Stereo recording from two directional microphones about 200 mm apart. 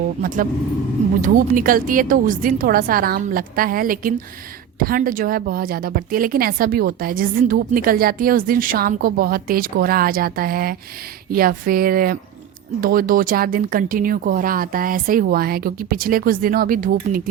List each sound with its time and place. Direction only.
0.2 s a woman's voice: 40° right (ahead or behind)